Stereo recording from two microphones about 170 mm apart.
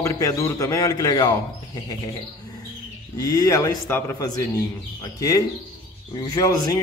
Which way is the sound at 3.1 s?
20° left (ahead or behind).